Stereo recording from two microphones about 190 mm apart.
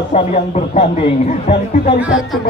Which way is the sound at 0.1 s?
35° left (ahead or behind).